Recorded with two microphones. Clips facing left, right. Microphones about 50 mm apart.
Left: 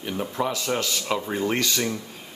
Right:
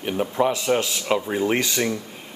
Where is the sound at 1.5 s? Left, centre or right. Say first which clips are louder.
Right 3 dB; centre.